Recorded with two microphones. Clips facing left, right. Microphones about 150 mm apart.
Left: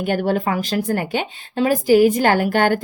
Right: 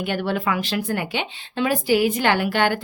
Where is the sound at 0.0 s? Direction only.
45° left (ahead or behind).